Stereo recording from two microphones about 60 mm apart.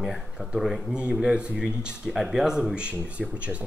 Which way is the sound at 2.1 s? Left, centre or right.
Centre.